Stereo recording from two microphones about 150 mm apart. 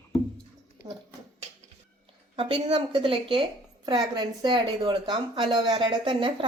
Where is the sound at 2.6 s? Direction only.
30° right (ahead or behind).